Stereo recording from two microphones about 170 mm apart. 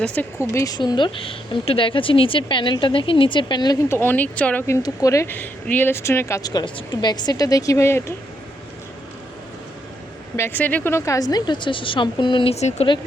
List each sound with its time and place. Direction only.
0.0 s speech: 10° left (ahead or behind); by 3.8 s 25° left (ahead or behind)
3.8 s speech: 15° left (ahead or behind)
10.3 s speech: 10° left (ahead or behind); by 12.9 s 40° left (ahead or behind)